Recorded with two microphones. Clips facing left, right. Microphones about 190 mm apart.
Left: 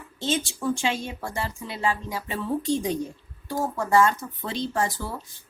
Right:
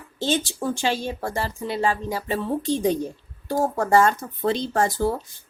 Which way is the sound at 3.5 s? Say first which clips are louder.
Right 4 dB; 35° right (ahead or behind).